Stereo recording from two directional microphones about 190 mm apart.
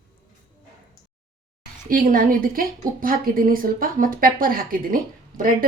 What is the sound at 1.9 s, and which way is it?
A woman's voice, 45° right (ahead or behind).